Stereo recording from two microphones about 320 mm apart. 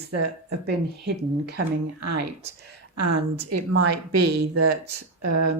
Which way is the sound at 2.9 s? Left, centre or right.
Right.